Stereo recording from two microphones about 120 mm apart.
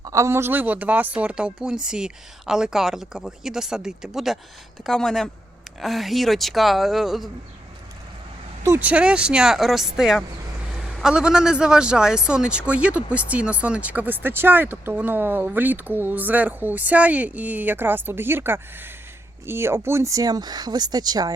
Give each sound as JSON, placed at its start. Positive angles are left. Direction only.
{"t": 0.0, "sound": "speech", "side_deg": -25}
{"t": 8.8, "sound": "a man's voice", "side_deg": -10}